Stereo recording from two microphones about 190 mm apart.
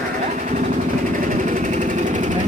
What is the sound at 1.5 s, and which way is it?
Engine, 40° right (ahead or behind).